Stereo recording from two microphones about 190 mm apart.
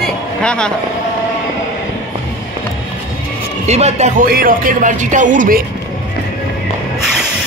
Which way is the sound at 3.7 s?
35° right (ahead or behind).